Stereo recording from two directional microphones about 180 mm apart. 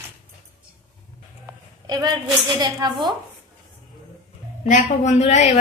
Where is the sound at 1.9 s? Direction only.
20° right (ahead or behind).